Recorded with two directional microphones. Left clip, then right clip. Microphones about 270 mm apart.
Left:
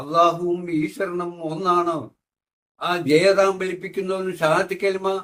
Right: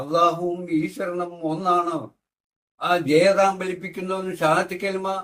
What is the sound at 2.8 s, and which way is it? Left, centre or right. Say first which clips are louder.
Speech: even; centre.